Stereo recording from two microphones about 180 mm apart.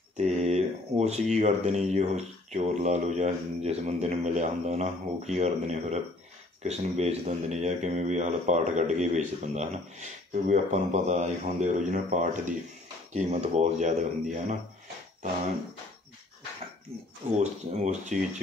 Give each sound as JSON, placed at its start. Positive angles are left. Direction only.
{"t": 0.2, "sound": "a sound", "side_deg": -40}
{"t": 1.3, "sound": "speech", "side_deg": -40}
{"t": 17.4, "sound": "speech", "side_deg": -40}